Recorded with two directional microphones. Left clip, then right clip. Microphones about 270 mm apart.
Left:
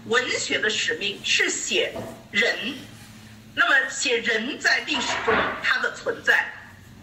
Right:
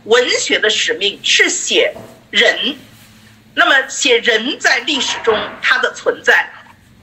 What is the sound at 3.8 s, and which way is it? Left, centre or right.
Speech, right.